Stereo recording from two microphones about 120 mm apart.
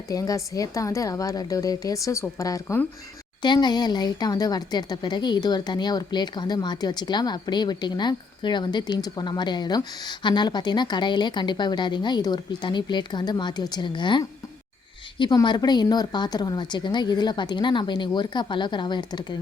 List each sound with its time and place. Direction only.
0.1 s a woman's voice: 30° left (ahead or behind)
15.4 s a woman's voice: 35° left (ahead or behind)